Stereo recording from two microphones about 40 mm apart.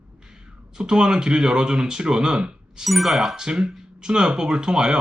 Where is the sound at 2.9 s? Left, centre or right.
Centre.